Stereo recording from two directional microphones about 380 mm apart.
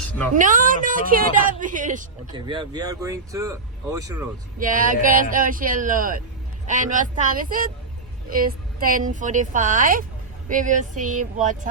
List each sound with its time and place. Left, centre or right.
0.3 s a woman's voice: centre
4.6 s a woman's voice: right